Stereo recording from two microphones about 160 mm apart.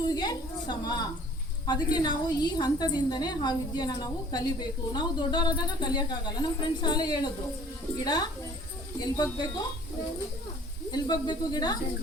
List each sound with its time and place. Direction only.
0.1 s a woman's voice: 25° left (ahead or behind)
10.9 s a woman's voice: 25° left (ahead or behind)